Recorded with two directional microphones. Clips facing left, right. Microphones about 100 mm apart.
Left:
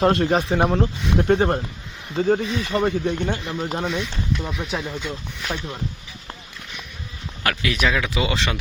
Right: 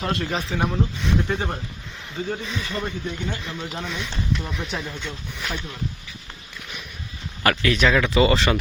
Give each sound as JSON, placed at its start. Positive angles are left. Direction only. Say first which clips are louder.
{"t": 0.0, "sound": "speech", "louder": "left 8 dB", "side_deg": 50}
{"t": 3.0, "sound": "speech", "louder": "left 6 dB", "side_deg": 60}
{"t": 3.9, "sound": "speech", "louder": "left 2 dB", "side_deg": 5}
{"t": 7.6, "sound": "speech", "louder": "right 2 dB", "side_deg": 5}